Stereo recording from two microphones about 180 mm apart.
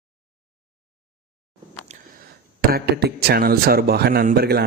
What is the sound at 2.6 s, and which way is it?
A man's voice, 60° right (ahead or behind).